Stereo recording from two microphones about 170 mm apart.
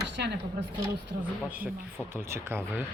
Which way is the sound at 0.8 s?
10° right (ahead or behind).